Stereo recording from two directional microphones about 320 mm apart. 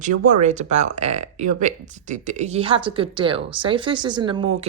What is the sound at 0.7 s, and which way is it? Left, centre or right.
A woman's voice, right.